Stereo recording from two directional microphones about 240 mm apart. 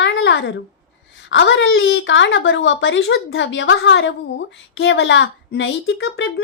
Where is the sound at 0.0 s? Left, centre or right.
Left.